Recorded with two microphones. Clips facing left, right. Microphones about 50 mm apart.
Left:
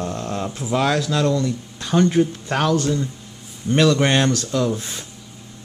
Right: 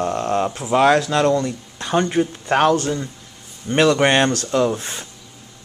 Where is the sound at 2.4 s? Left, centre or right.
Right.